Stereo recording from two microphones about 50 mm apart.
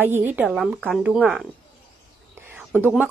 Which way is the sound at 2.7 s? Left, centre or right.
Right.